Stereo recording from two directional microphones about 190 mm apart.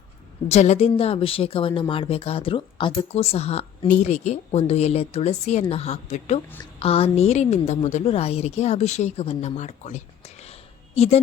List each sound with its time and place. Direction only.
0.4 s a woman's voice: 35° left (ahead or behind)